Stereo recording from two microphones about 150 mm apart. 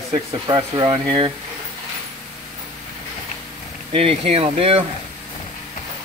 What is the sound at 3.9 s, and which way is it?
Speech, 40° right (ahead or behind).